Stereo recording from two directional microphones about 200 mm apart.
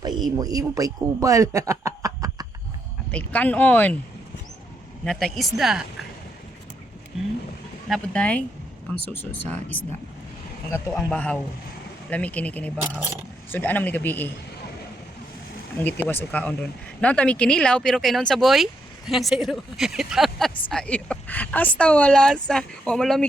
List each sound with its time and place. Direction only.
0.0 s a man's voice: 20° right (ahead or behind)
3.1 s speech: 5° left (ahead or behind)
5.0 s speech: centre (ahead or behind)
7.9 s speech: 5° left (ahead or behind)
10.7 s speech: 5° left (ahead or behind)
15.8 s speech: 10° left (ahead or behind)